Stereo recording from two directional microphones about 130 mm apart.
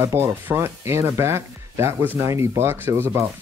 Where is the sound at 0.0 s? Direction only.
20° right (ahead or behind).